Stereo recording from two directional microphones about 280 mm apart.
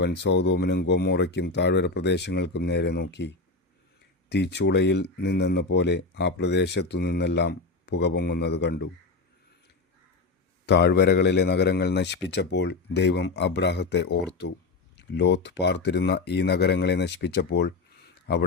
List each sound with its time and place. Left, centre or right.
0.0 s speech: left
10.7 s speech: left